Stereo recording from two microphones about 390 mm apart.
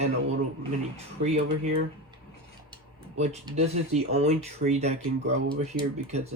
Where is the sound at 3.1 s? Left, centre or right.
Centre.